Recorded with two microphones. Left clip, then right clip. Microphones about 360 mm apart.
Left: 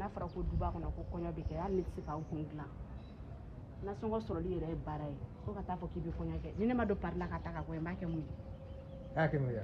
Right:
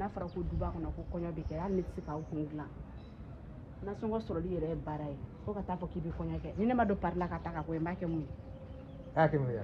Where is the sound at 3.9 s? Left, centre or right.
Centre.